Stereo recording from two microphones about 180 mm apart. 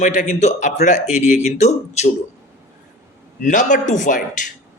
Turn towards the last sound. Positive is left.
turn(degrees=45)  # may be behind; listen again after turning